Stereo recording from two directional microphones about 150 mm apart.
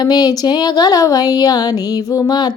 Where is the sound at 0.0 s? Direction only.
25° left (ahead or behind).